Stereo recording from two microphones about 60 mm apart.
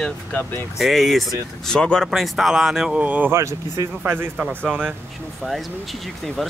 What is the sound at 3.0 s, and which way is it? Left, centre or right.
Speech, right.